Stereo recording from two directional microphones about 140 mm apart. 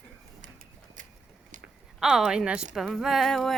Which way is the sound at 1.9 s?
5° right (ahead or behind).